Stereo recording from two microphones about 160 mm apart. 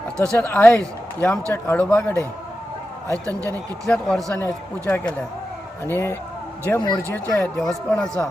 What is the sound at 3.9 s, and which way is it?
A man's voice, 5° left (ahead or behind).